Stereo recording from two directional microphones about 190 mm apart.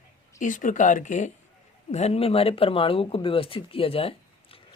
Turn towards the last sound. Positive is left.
turn(degrees=30)  # may be behind; listen again after turning